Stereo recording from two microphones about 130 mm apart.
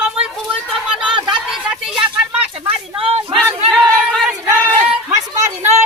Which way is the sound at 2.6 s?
45° right (ahead or behind).